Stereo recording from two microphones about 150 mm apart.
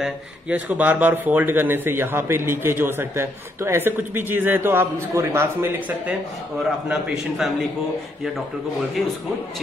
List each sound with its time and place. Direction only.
0.0 s a man's voice: 10° right (ahead or behind)